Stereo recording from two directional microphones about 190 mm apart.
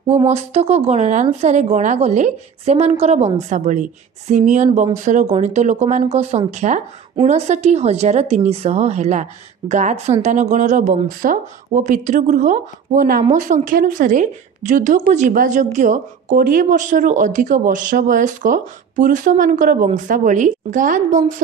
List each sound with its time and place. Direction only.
0.3 s a woman's voice: 35° right (ahead or behind)